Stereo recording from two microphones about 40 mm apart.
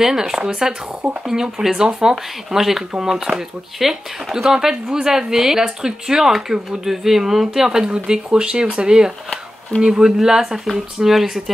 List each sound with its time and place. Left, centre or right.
0.0 s speech: centre